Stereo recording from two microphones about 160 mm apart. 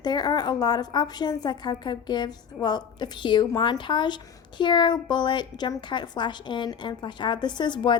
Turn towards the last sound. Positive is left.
turn(degrees=30)  # may be behind; listen again after turning